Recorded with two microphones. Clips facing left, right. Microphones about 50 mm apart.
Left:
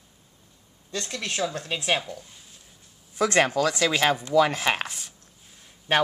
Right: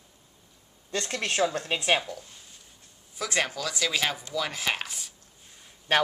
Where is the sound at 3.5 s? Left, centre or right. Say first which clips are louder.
Left 7 dB; left.